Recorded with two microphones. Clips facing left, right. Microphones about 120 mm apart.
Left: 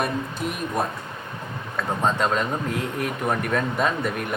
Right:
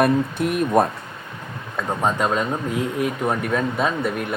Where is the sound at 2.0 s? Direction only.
10° right (ahead or behind).